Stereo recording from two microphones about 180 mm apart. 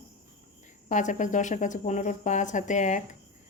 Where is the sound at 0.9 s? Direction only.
45° left (ahead or behind).